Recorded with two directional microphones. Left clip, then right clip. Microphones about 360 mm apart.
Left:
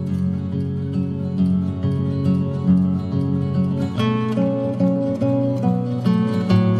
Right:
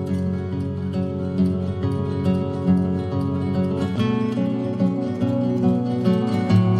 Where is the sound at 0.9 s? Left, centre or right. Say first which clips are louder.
Right 2 dB; centre.